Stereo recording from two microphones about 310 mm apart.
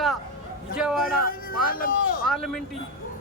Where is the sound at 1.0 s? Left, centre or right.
Left.